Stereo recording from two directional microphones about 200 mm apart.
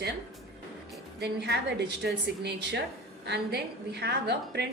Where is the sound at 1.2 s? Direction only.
55° right (ahead or behind).